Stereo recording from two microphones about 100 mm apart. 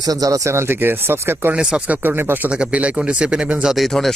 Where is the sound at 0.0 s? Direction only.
35° right (ahead or behind).